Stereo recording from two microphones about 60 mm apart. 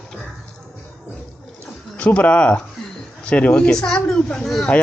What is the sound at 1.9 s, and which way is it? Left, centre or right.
Speech, left.